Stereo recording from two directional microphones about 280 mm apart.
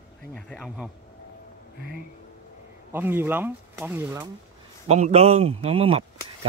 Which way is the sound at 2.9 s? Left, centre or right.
Centre.